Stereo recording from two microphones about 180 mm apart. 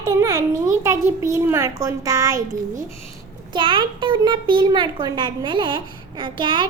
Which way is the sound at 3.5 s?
25° right (ahead or behind).